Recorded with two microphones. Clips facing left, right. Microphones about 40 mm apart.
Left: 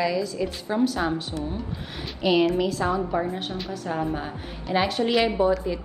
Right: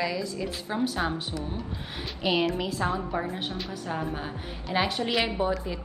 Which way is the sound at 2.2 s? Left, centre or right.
Centre.